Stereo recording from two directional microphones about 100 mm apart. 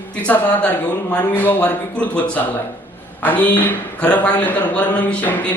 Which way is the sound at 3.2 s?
15° left (ahead or behind).